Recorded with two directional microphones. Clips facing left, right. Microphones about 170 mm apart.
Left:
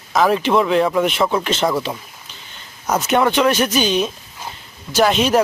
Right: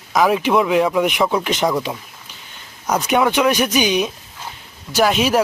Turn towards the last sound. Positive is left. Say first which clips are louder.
# left 1 dB
turn(degrees=-5)  # may be behind; listen again after turning